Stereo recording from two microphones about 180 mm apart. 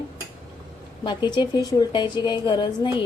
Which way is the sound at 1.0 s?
25° left (ahead or behind).